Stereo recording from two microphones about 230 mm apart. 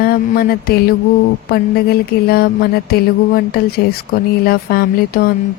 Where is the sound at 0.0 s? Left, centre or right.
Left.